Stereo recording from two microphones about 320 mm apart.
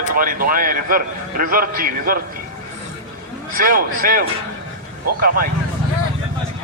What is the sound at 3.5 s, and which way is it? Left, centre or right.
Speech, right.